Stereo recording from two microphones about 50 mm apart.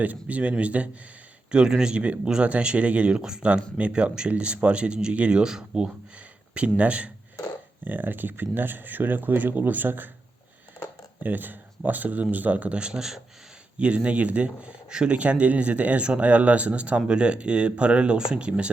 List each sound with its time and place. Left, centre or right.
0.0 s speech: right
1.5 s speech: centre
6.5 s speech: right
7.9 s speech: right
11.2 s speech: right; by 13.2 s centre
13.7 s speech: right